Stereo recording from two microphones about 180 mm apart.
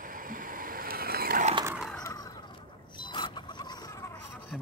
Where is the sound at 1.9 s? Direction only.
20° left (ahead or behind).